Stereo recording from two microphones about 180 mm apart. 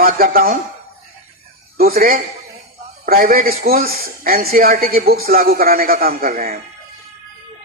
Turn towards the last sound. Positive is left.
turn(degrees=-55)  # may be behind; listen again after turning